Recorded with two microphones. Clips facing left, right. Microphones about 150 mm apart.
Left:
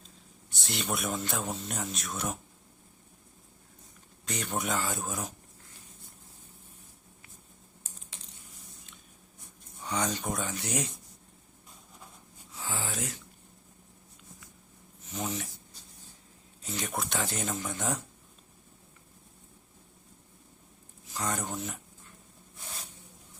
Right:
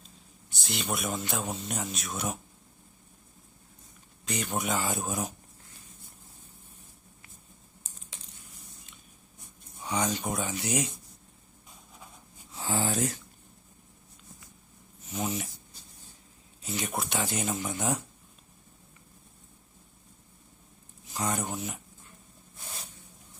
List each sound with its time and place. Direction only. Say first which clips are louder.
0.5 s speech: even; centre (ahead or behind)
4.3 s speech: right 2 dB; centre (ahead or behind)
4.8 s speech: right 3 dB; 15° right (ahead or behind)
9.8 s speech: right 2 dB; 5° right (ahead or behind)
12.5 s speech: right 7 dB; 35° right (ahead or behind)
15.1 s speech: right 3 dB; 10° right (ahead or behind)
16.6 s speech: right 2 dB; 5° right (ahead or behind)
21.1 s speech: right 2 dB; 10° right (ahead or behind)